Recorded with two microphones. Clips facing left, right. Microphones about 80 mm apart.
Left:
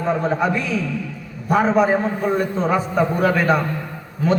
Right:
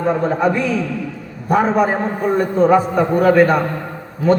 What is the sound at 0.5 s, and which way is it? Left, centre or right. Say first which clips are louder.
Speech: right 4 dB; right.